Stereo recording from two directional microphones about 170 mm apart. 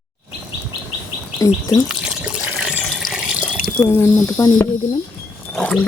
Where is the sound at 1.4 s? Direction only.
20° left (ahead or behind).